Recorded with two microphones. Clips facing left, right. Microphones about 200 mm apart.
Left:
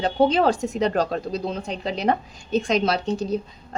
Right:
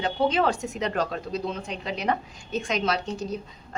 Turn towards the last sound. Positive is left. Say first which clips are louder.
# left 5 dB
turn(degrees=30)  # may be behind; listen again after turning